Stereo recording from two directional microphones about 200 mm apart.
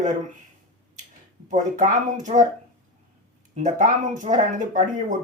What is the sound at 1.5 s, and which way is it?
Speech, 40° right (ahead or behind).